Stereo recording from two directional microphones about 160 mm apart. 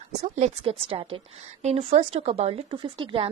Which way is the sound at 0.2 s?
40° right (ahead or behind).